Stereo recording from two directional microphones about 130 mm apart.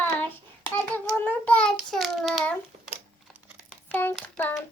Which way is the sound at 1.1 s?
10° left (ahead or behind).